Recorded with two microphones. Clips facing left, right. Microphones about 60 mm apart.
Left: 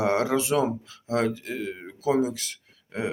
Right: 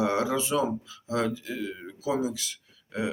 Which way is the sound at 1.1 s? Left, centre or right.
Left.